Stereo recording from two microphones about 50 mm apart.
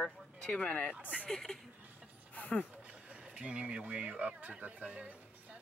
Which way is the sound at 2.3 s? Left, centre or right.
Left.